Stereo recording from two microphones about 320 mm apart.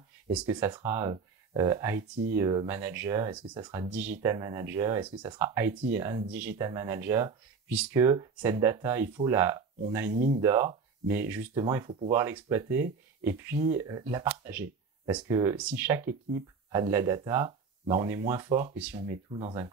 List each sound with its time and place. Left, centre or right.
0.3 s speech: centre
10.1 s speech: right
10.4 s speech: centre